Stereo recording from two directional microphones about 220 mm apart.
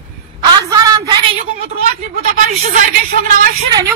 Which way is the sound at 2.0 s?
35° right (ahead or behind).